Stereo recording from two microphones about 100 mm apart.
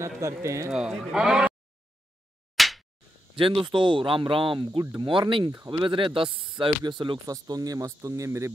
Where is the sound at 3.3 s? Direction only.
60° right (ahead or behind).